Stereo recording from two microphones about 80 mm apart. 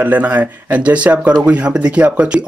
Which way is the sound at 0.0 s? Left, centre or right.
Centre.